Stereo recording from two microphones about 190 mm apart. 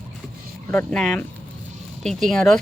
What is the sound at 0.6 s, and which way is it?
Speech, 5° left (ahead or behind).